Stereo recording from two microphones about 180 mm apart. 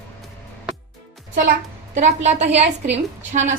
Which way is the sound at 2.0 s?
40° right (ahead or behind).